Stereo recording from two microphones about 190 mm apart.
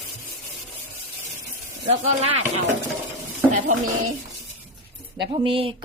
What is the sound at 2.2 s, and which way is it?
Speech, 35° right (ahead or behind).